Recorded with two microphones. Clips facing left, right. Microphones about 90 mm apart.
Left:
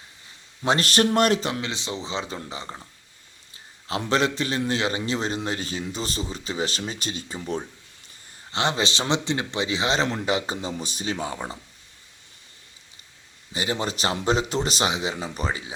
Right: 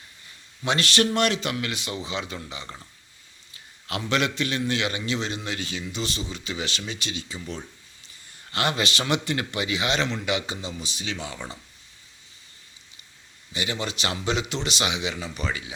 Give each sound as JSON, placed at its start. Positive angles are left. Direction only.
{"t": 0.6, "sound": "a man's voice", "side_deg": 40}
{"t": 1.6, "sound": "speech", "side_deg": 25}
{"t": 4.1, "sound": "a man's voice", "side_deg": 35}
{"t": 8.5, "sound": "a man's voice", "side_deg": 25}
{"t": 13.5, "sound": "a man's voice", "side_deg": 40}